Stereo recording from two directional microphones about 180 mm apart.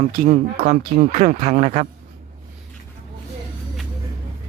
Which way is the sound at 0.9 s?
40° right (ahead or behind).